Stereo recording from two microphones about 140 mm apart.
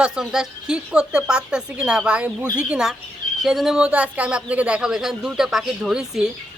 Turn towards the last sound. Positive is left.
turn(degrees=0)  # may be behind; listen again after turning